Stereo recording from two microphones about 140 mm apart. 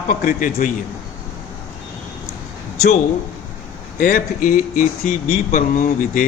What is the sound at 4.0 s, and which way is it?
Speech, 90° left.